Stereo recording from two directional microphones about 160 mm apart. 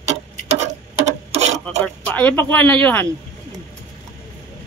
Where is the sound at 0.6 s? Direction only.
45° right (ahead or behind).